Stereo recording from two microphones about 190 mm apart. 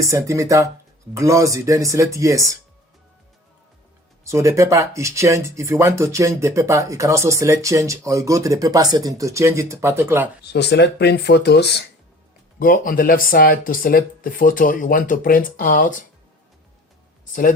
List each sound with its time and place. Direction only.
0.0 s speech: 15° right (ahead or behind)
4.2 s speech: 15° right (ahead or behind)
10.4 s speech: 60° left (ahead or behind)
12.5 s speech: 50° left (ahead or behind)